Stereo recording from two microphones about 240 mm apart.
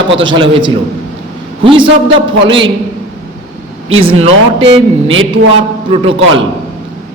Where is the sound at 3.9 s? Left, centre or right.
Right.